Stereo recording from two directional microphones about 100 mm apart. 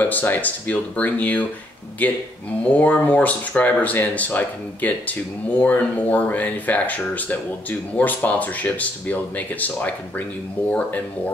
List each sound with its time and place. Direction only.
0.0 s speech: 20° left (ahead or behind)